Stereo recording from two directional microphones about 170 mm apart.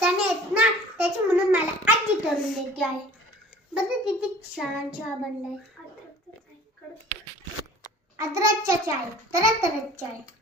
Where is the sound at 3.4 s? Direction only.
5° right (ahead or behind).